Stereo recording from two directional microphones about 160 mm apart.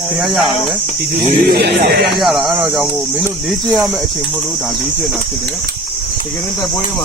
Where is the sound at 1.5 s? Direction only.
85° right.